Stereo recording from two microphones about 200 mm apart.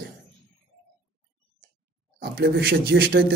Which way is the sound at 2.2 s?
55° right (ahead or behind).